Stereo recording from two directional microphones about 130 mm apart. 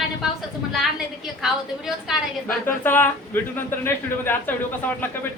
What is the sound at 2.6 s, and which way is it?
Speech, 15° left (ahead or behind).